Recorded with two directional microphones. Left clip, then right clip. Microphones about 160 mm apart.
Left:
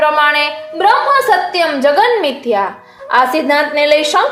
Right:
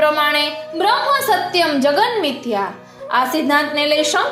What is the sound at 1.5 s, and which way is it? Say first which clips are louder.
A woman's voice: left 3 dB; 25° right (ahead or behind).